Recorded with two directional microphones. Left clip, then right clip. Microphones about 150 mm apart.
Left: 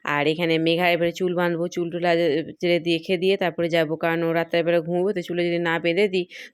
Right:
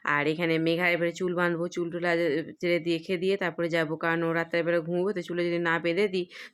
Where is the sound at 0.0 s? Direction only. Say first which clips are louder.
Left 4 dB; 20° left (ahead or behind).